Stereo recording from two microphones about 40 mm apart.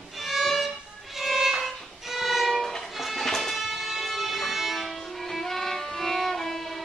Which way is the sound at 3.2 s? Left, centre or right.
Centre.